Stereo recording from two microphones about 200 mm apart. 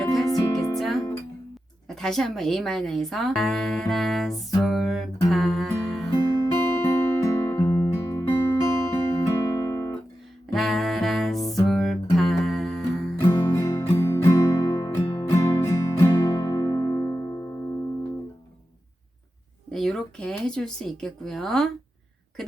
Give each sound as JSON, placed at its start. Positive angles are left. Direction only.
{"t": 0.3, "sound": "music", "side_deg": 15}
{"t": 0.8, "sound": "music", "side_deg": 0}
{"t": 2.0, "sound": "speech", "side_deg": 0}
{"t": 5.3, "sound": "music", "side_deg": 0}
{"t": 6.2, "sound": "music", "side_deg": 15}
{"t": 10.5, "sound": "music", "side_deg": 0}
{"t": 13.2, "sound": "music", "side_deg": 20}
{"t": 19.7, "sound": "a sound", "side_deg": 0}